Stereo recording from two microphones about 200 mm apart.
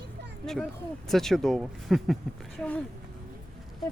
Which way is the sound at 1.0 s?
Centre (ahead or behind).